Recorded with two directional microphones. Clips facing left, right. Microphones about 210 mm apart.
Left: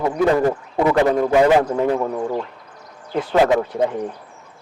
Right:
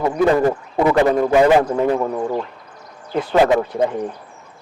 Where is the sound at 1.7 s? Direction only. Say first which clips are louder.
Right 1 dB; 30° right (ahead or behind).